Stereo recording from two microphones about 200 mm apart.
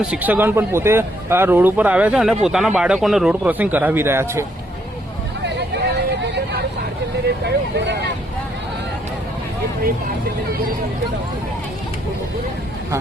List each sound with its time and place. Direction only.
0.0 s speech: 5° right (ahead or behind)
7.3 s speech: 60° right (ahead or behind)